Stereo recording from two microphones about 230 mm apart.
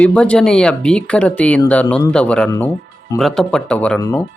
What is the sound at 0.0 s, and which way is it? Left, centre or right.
Speech, centre.